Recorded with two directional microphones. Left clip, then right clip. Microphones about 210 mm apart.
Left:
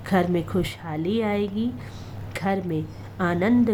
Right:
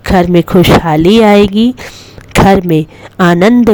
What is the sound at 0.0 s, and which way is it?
A woman's voice, 45° right (ahead or behind).